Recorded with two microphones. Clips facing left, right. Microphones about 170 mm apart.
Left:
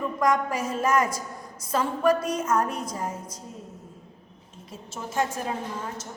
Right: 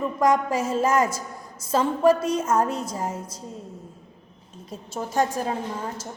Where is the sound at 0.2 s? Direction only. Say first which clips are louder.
Right 3 dB; 25° right (ahead or behind).